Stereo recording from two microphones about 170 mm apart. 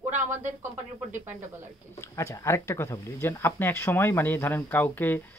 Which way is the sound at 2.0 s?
15° left (ahead or behind).